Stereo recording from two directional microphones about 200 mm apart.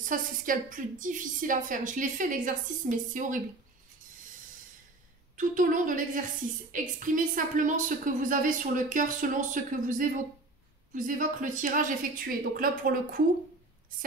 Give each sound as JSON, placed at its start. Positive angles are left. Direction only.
{"t": 0.0, "sound": "a woman's voice", "side_deg": -40}
{"t": 5.4, "sound": "a woman's voice", "side_deg": -40}